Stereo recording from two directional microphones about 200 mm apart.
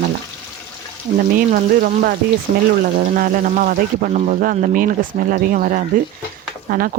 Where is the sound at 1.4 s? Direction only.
45° right (ahead or behind).